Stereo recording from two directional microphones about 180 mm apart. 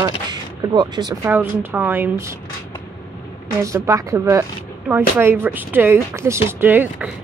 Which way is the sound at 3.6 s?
15° right (ahead or behind).